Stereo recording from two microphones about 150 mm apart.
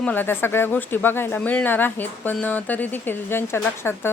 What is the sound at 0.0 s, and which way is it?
Speech, 10° left (ahead or behind).